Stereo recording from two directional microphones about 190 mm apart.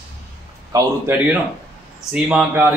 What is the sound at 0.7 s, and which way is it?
Speech, 10° right (ahead or behind).